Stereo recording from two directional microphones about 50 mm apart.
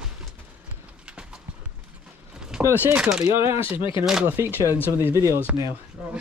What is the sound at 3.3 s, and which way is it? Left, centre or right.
Speech, right.